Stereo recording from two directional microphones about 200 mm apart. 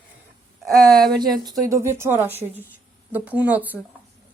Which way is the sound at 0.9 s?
20° right (ahead or behind).